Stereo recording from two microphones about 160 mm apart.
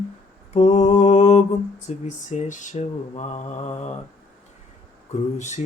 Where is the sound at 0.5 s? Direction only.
45° left (ahead or behind).